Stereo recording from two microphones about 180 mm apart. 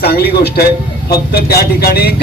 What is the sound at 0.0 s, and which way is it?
A man's voice, 60° left (ahead or behind).